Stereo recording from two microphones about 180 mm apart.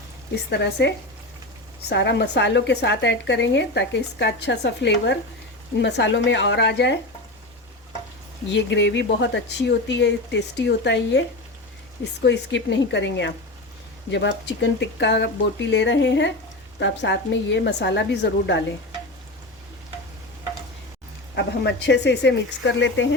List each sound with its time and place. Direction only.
0.6 s a woman's voice: 70° left (ahead or behind)
8.4 s speech: 80° left
12.2 s a woman's voice: 80° left
21.3 s a woman's voice: 70° left (ahead or behind); by 23.0 s 85° left